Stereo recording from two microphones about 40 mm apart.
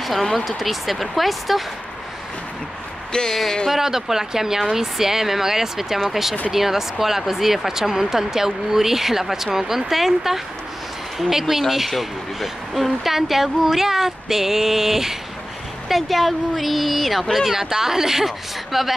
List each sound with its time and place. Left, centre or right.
0.0 s speech: centre
3.1 s speech: centre
3.7 s speech: centre